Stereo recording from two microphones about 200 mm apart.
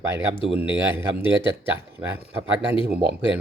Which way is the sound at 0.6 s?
10° right (ahead or behind).